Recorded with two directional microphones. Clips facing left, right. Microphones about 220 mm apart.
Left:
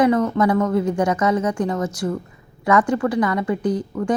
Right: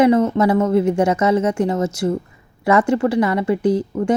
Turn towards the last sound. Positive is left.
turn(degrees=-25)  # may be behind; listen again after turning